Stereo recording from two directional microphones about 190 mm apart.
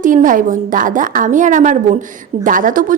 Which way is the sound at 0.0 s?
45° right (ahead or behind).